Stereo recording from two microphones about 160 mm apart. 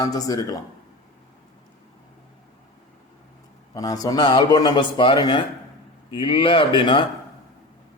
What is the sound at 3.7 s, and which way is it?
A man's voice, 25° left (ahead or behind).